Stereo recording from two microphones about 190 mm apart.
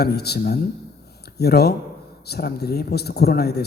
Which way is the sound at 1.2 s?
55° left (ahead or behind).